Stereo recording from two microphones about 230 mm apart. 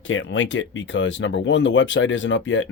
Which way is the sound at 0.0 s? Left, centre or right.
Left.